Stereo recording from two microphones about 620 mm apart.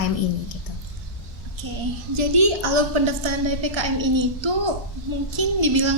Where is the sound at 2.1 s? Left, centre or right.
Right.